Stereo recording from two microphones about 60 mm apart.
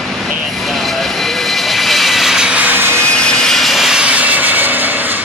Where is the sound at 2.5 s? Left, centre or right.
Right.